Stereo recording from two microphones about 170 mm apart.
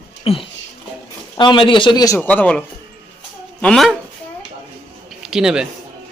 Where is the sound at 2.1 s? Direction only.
10° left (ahead or behind).